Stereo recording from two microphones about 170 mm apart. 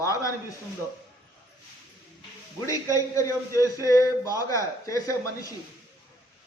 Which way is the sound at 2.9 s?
20° left (ahead or behind).